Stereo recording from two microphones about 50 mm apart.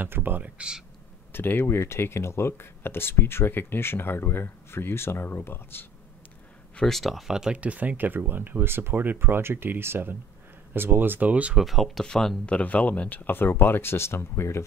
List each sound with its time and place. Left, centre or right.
0.0 s speech: right
0.6 s speech: centre
1.3 s speech: left
6.9 s speech: centre
7.2 s speech: centre
7.5 s speech: right
9.2 s speech: right
11.5 s speech: centre
12.4 s speech: left